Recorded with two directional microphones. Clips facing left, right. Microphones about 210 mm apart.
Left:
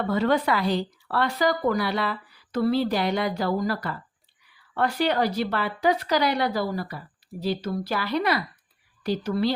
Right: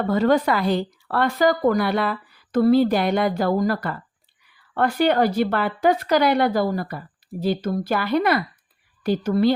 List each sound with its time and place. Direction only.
0.1 s speech: 45° right (ahead or behind)